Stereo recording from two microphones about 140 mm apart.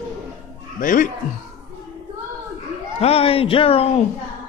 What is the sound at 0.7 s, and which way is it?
Speech, 75° left (ahead or behind).